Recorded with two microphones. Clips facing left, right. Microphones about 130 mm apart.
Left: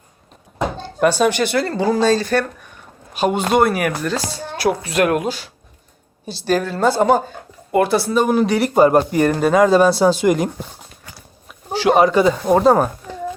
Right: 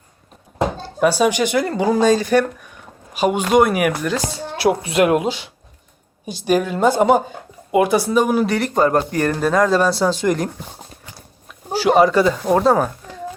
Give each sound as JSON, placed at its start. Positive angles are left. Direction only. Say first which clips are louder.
{"t": 0.8, "sound": "speech", "louder": "left 1 dB", "side_deg": -10}
{"t": 11.7, "sound": "speech", "louder": "even", "side_deg": 0}